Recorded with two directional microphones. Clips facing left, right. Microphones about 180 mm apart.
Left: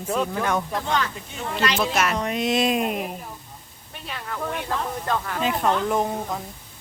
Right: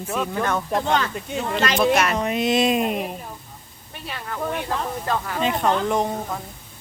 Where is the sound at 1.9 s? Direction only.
Centre (ahead or behind).